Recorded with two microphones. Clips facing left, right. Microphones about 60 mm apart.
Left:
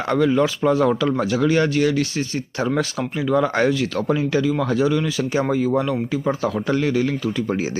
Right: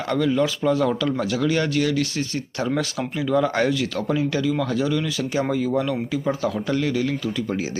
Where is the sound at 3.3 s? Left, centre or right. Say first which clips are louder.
Left 2 dB; centre.